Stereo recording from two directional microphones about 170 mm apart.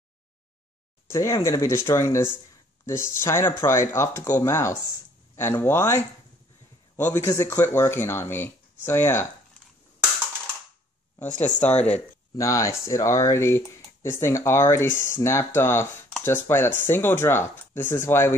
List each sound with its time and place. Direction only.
1.0 s speech: 15° left (ahead or behind)
11.4 s speech: 10° left (ahead or behind)